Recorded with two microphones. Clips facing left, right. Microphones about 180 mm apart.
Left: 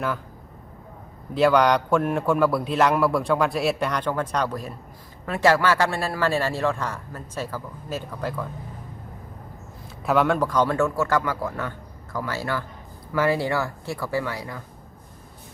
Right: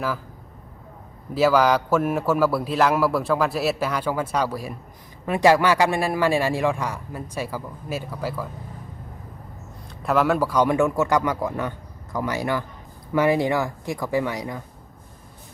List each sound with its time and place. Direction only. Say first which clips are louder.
1.3 s a man's voice: even; 5° right (ahead or behind)
10.0 s a man's voice: even; centre (ahead or behind); by 14.6 s 20° right (ahead or behind)